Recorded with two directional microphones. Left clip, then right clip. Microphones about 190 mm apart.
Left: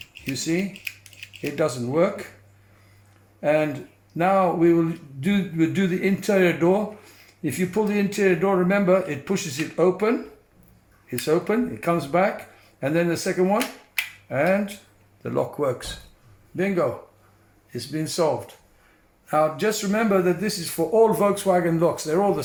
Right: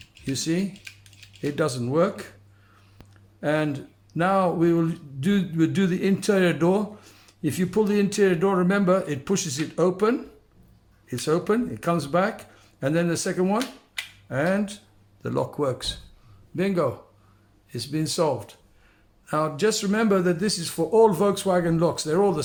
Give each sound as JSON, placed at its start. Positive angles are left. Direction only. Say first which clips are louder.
{"t": 0.3, "sound": "a man's voice", "louder": "left 1 dB", "side_deg": -30}
{"t": 3.4, "sound": "a man's voice", "louder": "left 4 dB", "side_deg": -30}
{"t": 11.3, "sound": "a man's voice", "louder": "left 1 dB", "side_deg": -25}
{"t": 17.7, "sound": "speech", "louder": "right 1 dB", "side_deg": -35}
{"t": 19.3, "sound": "speech", "louder": "left 2 dB", "side_deg": -30}